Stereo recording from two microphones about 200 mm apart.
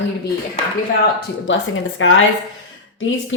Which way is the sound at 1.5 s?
70° left (ahead or behind).